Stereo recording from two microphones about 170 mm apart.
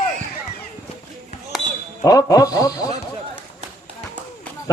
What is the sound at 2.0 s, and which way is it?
Speech, 20° left (ahead or behind).